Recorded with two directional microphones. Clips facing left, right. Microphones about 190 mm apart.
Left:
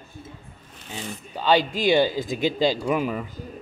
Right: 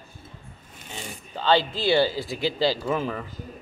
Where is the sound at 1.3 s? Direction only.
15° left (ahead or behind).